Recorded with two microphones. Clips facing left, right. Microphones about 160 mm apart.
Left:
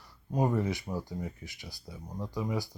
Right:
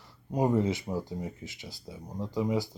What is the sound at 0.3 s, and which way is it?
Speech, 20° right (ahead or behind).